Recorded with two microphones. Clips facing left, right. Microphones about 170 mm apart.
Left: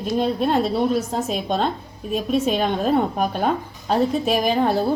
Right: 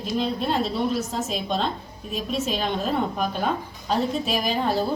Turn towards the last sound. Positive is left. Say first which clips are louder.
# left 5 dB
turn(degrees=55)  # may be behind; listen again after turning